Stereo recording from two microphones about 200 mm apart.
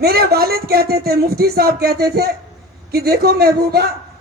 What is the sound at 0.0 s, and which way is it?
A man's voice, 50° right (ahead or behind).